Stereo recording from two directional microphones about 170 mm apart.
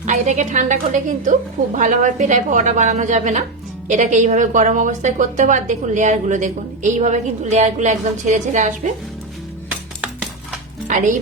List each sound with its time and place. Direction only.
0.0 s a woman's voice: 45° right (ahead or behind)
10.8 s dishes: 50° right (ahead or behind)